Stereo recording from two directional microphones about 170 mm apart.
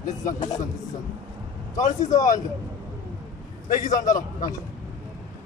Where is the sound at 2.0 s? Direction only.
20° left (ahead or behind).